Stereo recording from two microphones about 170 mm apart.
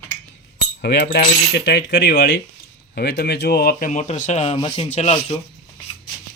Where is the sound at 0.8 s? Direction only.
75° left (ahead or behind); by 4.5 s 40° left (ahead or behind).